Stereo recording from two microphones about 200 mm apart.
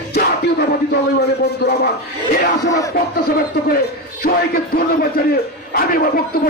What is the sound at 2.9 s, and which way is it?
A man's voice, 50° left (ahead or behind).